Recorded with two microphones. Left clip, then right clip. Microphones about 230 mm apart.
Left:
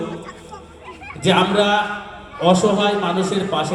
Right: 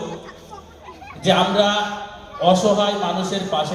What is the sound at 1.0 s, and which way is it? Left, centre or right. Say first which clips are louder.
A man's voice: left 1 dB; left.